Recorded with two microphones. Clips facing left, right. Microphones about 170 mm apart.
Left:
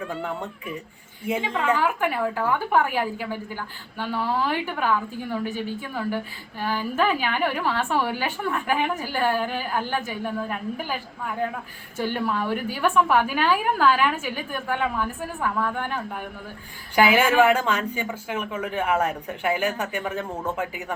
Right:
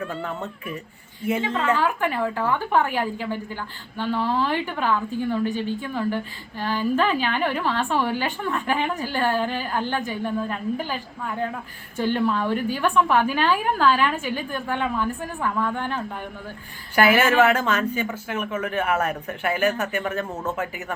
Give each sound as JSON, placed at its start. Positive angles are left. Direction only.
{"t": 0.0, "sound": "a woman's voice", "side_deg": 10}
{"t": 11.9, "sound": "a woman's voice", "side_deg": 10}